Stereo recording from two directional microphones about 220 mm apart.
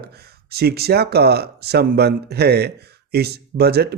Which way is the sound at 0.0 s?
45° right (ahead or behind).